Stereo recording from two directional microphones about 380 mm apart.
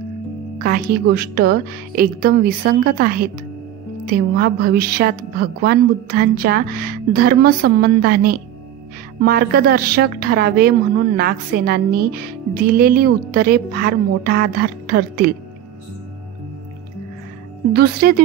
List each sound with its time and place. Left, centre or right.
0.6 s a woman's voice: right
17.7 s a woman's voice: right